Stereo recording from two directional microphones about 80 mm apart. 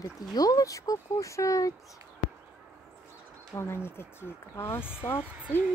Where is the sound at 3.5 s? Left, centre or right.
Left.